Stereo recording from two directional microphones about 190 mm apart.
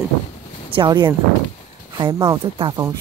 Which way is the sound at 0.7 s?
25° right (ahead or behind).